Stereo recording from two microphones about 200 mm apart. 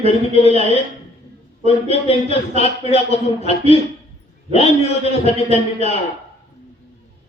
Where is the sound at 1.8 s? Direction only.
30° left (ahead or behind).